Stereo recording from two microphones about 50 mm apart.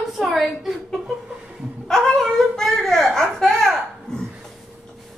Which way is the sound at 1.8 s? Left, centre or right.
Centre.